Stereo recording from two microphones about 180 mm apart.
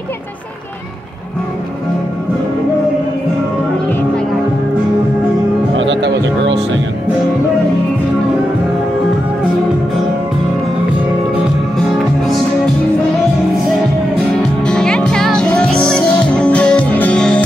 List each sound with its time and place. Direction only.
5.8 s music: 80° right
14.6 s music: 5° left (ahead or behind)